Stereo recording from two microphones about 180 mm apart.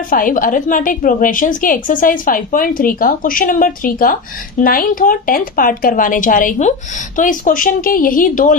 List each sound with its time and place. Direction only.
0.1 s a woman's voice: 50° left (ahead or behind)